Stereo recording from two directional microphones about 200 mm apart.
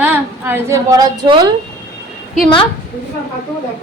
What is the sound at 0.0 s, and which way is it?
A woman's voice, 10° right (ahead or behind).